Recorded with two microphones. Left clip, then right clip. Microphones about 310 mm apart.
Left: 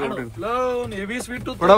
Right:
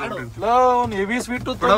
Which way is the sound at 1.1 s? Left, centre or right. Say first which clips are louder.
Right 4 dB; right.